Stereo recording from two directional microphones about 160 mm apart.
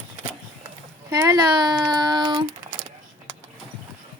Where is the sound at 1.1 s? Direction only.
20° right (ahead or behind).